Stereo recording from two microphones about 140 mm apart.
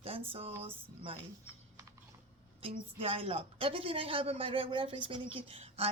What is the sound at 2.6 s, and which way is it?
A woman's voice, 45° right (ahead or behind).